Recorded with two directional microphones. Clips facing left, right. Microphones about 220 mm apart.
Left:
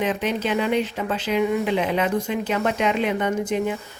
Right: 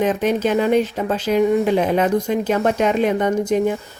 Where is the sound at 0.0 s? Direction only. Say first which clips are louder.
Right 6 dB; 45° right (ahead or behind).